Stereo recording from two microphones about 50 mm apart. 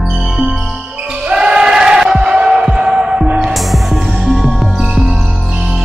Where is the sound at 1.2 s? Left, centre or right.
Centre.